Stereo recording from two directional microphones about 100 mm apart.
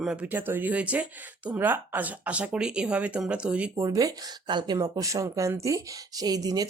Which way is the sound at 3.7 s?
40° right (ahead or behind).